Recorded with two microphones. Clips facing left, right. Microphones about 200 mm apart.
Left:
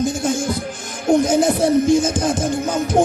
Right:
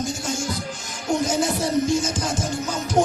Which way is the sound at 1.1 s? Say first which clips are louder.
Left 7 dB; 55° left (ahead or behind).